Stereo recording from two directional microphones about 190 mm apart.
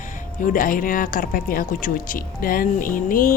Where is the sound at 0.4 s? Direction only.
45° left (ahead or behind).